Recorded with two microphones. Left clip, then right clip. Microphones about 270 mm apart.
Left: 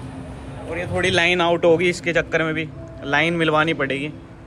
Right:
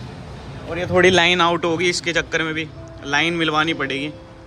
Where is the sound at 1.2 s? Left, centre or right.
Centre.